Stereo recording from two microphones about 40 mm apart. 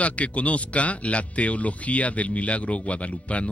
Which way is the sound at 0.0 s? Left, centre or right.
Left.